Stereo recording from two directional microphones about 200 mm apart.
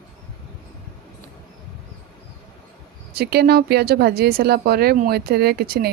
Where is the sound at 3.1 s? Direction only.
50° right (ahead or behind).